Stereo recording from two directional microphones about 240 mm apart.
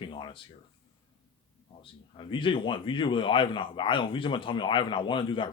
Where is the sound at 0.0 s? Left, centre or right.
Centre.